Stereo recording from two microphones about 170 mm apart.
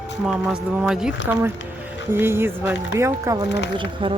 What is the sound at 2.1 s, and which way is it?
Speech, 15° right (ahead or behind).